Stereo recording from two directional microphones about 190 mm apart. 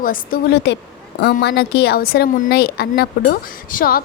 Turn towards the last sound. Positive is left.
turn(degrees=50)  # may be behind; listen again after turning